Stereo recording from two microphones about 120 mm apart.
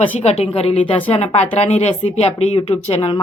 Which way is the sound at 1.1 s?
65° left (ahead or behind).